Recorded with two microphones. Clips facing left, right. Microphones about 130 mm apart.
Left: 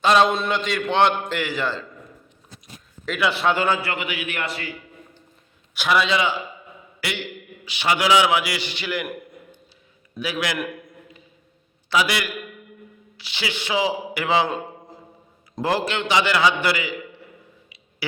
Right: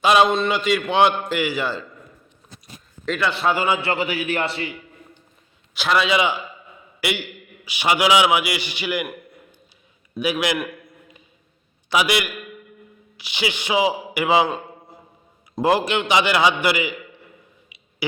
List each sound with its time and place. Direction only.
0.0 s a man's voice: 10° right (ahead or behind)
0.3 s a man's voice: centre (ahead or behind)
3.1 s a man's voice: 5° left (ahead or behind)
3.4 s a man's voice: 5° right (ahead or behind)
3.8 s a man's voice: 30° right (ahead or behind)
6.1 s a man's voice: 15° right (ahead or behind)
10.2 s a man's voice: 15° right (ahead or behind)
11.9 s a man's voice: 15° right (ahead or behind)
15.6 s a man's voice: 15° right (ahead or behind)